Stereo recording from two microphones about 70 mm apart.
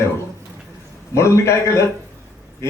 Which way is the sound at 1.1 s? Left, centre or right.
Left.